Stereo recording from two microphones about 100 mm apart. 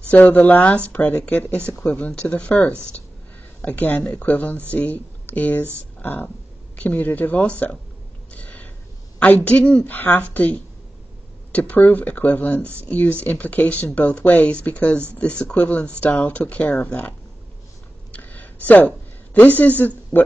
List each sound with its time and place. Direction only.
0.1 s speech: 15° left (ahead or behind)
5.9 s a sound: 20° left (ahead or behind)
6.8 s speech: 15° left (ahead or behind)
8.3 s gasp: 15° left (ahead or behind)
9.2 s speech: 15° left (ahead or behind)
18.1 s a sound: 20° left (ahead or behind)
18.7 s speech: 15° left (ahead or behind)